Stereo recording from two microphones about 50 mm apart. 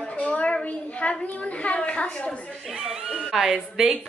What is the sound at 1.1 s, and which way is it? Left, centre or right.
Speech, left.